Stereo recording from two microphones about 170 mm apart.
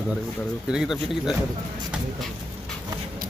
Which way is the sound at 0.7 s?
5° right (ahead or behind).